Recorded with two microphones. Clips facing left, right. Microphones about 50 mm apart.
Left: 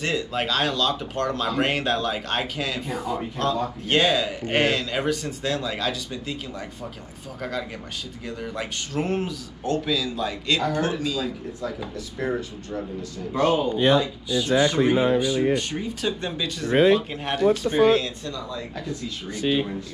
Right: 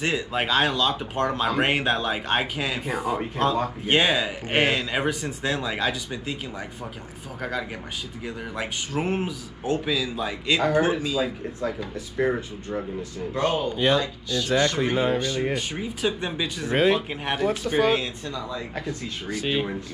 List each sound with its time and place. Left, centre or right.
0.0 s speech: centre
8.5 s a man's voice: centre
13.5 s speech: centre
15.5 s a man's voice: centre
17.6 s speech: right